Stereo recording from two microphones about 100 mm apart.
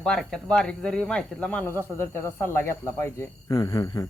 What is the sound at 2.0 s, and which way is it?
Speech, 25° left (ahead or behind).